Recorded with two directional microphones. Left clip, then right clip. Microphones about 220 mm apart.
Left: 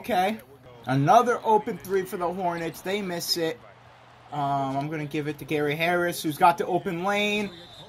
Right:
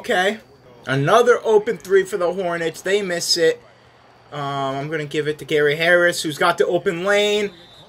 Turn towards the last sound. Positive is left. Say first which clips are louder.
# right 2 dB
turn(degrees=0)  # may be behind; listen again after turning